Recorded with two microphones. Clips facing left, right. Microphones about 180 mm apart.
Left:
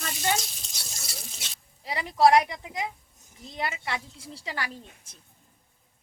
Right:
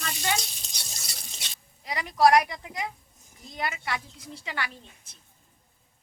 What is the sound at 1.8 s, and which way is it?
Speech, 30° left (ahead or behind).